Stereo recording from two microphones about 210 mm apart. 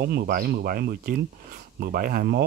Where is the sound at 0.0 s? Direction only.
45° right (ahead or behind).